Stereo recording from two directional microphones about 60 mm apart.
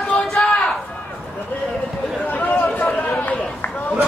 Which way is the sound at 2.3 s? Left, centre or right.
Left.